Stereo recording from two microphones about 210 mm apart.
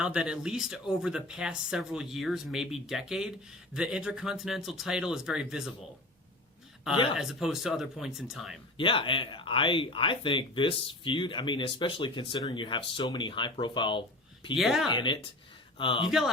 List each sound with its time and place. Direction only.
0.0 s speech: 5° right (ahead or behind)
7.2 s speech: centre (ahead or behind)
8.8 s speech: 25° left (ahead or behind)
14.5 s speech: centre (ahead or behind)
14.8 s speech: 20° left (ahead or behind)
16.0 s speech: centre (ahead or behind)